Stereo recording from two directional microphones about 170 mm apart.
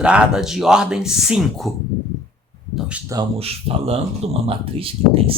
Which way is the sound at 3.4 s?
35° right (ahead or behind).